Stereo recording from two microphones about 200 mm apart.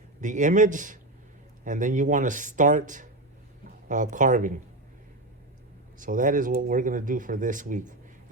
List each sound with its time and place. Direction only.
0.2 s speech: 40° right (ahead or behind)
6.0 s speech: 40° right (ahead or behind)